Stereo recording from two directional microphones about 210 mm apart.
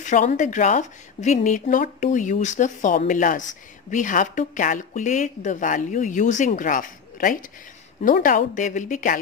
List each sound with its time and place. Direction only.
0.0 s speech: 40° left (ahead or behind)